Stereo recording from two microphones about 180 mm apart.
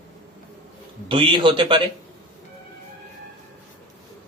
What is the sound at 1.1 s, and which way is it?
Speech, 30° right (ahead or behind).